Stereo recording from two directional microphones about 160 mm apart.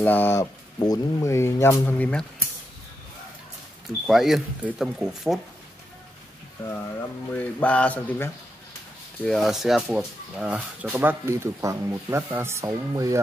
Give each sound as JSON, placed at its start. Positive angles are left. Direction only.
{"t": 0.0, "sound": "speech", "side_deg": 10}
{"t": 4.1, "sound": "speech", "side_deg": 0}
{"t": 6.7, "sound": "speech", "side_deg": 15}